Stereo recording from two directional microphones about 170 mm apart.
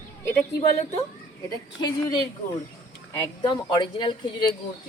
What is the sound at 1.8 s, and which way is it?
A woman's voice, 25° left (ahead or behind).